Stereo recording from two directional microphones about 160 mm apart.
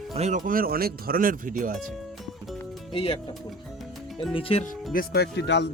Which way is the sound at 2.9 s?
35° left (ahead or behind).